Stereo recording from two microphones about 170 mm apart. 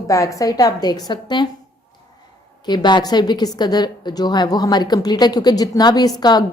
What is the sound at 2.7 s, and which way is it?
A woman's voice, 25° left (ahead or behind).